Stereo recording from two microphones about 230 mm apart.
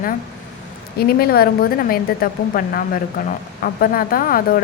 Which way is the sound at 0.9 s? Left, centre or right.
Left.